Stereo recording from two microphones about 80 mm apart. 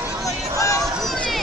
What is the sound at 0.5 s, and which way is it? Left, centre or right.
Chatter, left.